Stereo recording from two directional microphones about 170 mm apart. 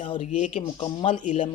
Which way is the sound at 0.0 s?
30° left (ahead or behind).